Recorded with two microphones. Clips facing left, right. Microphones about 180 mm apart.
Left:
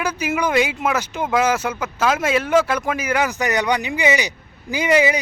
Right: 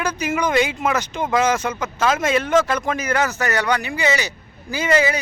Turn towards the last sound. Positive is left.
turn(degrees=15)  # may be behind; listen again after turning